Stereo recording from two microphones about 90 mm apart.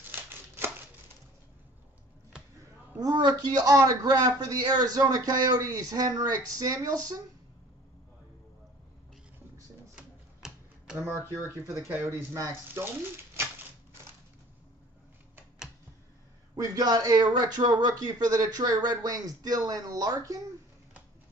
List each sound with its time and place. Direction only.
3.0 s a man's voice: 50° right (ahead or behind)
9.9 s typewriter: 10° right (ahead or behind)
11.9 s speech: 25° right (ahead or behind)
16.5 s a man's voice: 50° right (ahead or behind)